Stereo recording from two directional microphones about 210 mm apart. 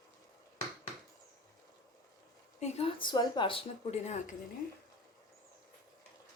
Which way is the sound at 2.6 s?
25° left (ahead or behind).